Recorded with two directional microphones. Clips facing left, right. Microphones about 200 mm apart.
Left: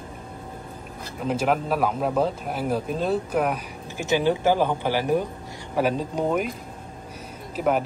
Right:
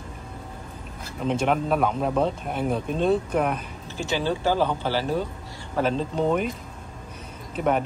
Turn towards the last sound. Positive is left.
turn(degrees=5)  # may be behind; listen again after turning